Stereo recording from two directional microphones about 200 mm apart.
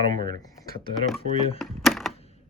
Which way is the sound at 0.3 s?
20° left (ahead or behind).